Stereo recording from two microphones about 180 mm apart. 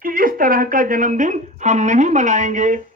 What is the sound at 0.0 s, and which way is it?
A woman's voice, 50° right (ahead or behind).